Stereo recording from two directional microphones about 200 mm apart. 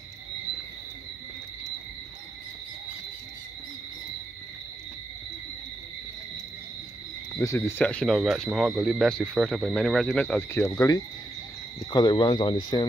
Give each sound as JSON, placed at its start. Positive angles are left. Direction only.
{"t": 7.3, "sound": "speech", "side_deg": 10}